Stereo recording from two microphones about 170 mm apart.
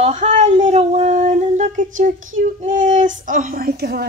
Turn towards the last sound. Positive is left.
turn(degrees=-65)  # may be behind; listen again after turning